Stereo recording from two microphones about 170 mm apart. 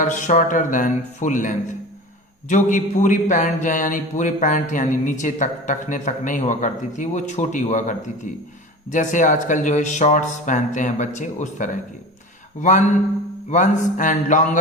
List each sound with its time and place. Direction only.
0.0 s a man's voice: 45° left (ahead or behind)
13.5 s a man's voice: 45° left (ahead or behind)